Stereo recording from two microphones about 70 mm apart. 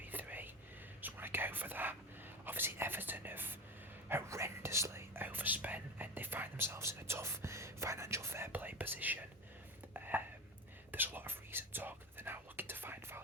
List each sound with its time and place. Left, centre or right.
0.0 s whispering: right
4.1 s whispering: right
8.5 s whispering: right
9.9 s a sound: right
10.9 s whispering: right